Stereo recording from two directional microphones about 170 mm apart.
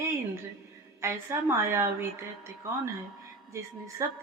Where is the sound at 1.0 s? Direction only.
15° right (ahead or behind).